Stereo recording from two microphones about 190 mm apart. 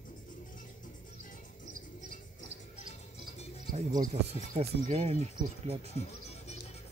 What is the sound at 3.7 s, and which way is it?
Speech, 40° right (ahead or behind).